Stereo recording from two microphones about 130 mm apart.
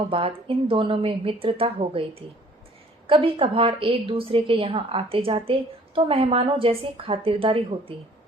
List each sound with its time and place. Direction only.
0.1 s a woman's voice: 45° right (ahead or behind)